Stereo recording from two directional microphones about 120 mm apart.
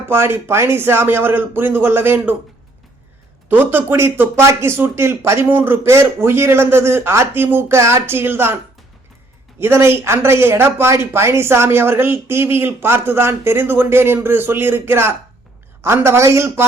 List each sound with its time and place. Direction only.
0.0 s speech: 20° right (ahead or behind)
3.5 s speech: 15° right (ahead or behind)
9.6 s speech: 20° right (ahead or behind)